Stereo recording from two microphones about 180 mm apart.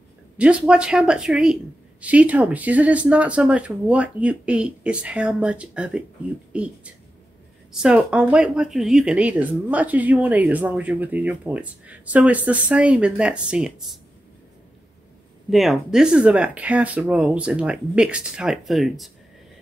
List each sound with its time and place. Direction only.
0.4 s speech: 5° right (ahead or behind)
15.5 s speech: centre (ahead or behind)